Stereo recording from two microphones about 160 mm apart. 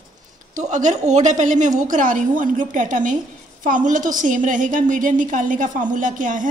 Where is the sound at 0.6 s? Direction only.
50° right (ahead or behind).